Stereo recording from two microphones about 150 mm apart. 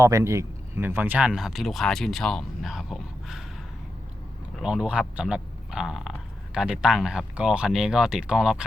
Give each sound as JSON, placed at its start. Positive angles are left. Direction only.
{"t": 0.0, "sound": "speech", "side_deg": -20}
{"t": 4.5, "sound": "speech", "side_deg": -5}